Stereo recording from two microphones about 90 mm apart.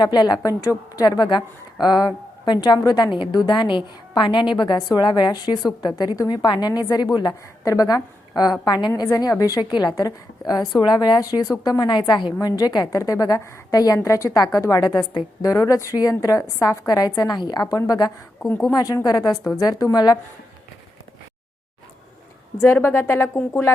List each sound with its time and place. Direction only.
0.0 s a woman's voice: 50° left (ahead or behind)
9.0 s a woman's voice: 40° left (ahead or behind)
9.6 s a woman's voice: 50° left (ahead or behind)
18.4 s speech: 30° left (ahead or behind)
18.7 s a woman's voice: 40° left (ahead or behind)
22.6 s speech: 25° left (ahead or behind)